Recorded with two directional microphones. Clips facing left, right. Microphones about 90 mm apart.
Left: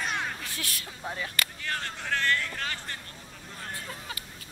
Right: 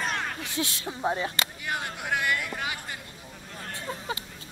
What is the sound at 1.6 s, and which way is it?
Speech, 15° right (ahead or behind).